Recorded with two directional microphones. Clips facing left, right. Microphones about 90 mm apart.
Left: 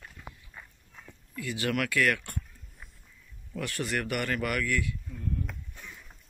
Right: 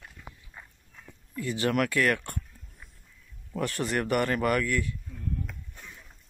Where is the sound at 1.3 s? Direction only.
30° right (ahead or behind).